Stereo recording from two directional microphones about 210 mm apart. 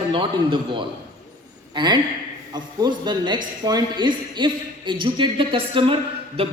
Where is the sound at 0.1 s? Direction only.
25° right (ahead or behind).